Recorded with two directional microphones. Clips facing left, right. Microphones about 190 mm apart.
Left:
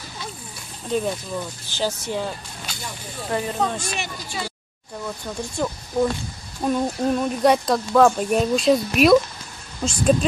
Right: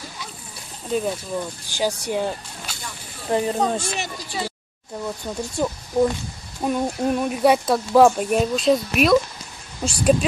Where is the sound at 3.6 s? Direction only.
35° right (ahead or behind).